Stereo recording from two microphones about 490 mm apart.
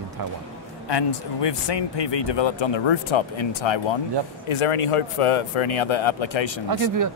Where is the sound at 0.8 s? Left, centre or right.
Left.